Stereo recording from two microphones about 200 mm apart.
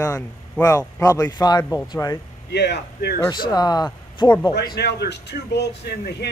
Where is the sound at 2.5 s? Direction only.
55° left (ahead or behind).